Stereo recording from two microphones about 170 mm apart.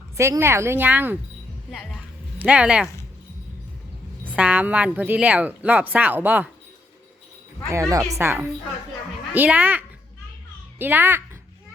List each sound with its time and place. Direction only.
0.2 s a woman's voice: 15° right (ahead or behind)
2.4 s a woman's voice: 5° right (ahead or behind)
4.2 s a woman's voice: 10° right (ahead or behind)
7.7 s a woman's voice: 20° right (ahead or behind)